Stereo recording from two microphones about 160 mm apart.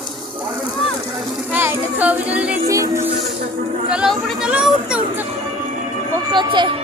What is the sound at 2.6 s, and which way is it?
Music, 20° right (ahead or behind).